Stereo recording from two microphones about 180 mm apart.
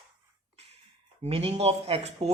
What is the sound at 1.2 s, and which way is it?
Speech, 35° right (ahead or behind).